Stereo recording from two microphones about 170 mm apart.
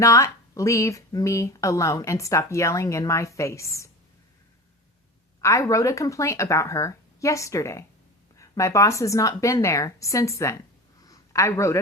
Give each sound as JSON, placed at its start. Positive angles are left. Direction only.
{"t": 0.0, "sound": "speech", "side_deg": 20}
{"t": 5.4, "sound": "speech", "side_deg": 20}
{"t": 11.0, "sound": "a sound", "side_deg": 20}